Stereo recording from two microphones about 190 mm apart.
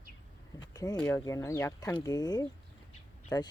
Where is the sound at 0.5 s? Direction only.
20° left (ahead or behind).